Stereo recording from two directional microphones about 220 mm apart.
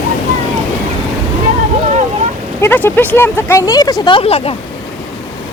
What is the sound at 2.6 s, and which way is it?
Speech, 10° left (ahead or behind).